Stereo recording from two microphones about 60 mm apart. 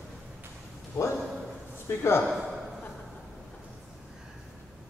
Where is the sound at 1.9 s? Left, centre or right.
Left.